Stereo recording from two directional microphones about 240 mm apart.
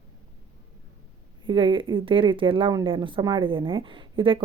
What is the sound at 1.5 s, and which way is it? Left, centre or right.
Speech, right.